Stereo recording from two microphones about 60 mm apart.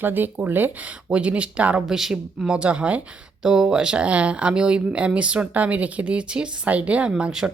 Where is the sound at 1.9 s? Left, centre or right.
Centre.